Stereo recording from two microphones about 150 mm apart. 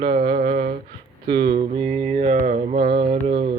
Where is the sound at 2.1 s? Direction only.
50° right (ahead or behind).